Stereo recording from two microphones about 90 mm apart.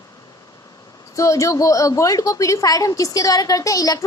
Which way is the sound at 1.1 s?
35° left (ahead or behind).